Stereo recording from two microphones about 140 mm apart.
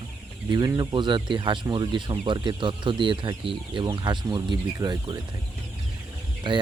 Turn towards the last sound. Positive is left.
turn(degrees=-35)  # may be behind; listen again after turning